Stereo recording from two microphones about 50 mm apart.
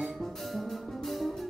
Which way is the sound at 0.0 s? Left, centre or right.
Centre.